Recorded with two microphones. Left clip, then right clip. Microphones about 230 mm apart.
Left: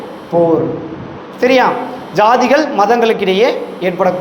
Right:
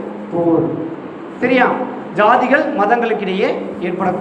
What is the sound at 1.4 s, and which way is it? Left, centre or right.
A man's voice, left.